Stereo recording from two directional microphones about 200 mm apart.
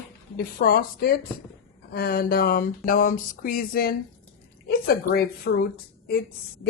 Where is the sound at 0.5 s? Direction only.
50° left (ahead or behind).